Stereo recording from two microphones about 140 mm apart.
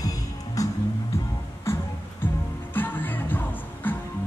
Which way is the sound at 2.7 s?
15° left (ahead or behind).